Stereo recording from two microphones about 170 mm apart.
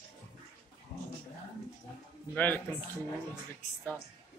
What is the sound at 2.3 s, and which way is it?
Speech, 10° left (ahead or behind).